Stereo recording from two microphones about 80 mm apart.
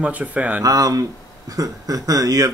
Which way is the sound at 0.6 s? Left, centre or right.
Right.